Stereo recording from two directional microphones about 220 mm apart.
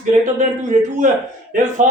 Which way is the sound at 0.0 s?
35° right (ahead or behind).